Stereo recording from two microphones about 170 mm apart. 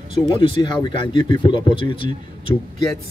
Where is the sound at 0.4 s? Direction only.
30° left (ahead or behind).